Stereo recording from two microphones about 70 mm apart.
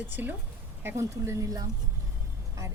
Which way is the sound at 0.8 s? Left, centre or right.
Right.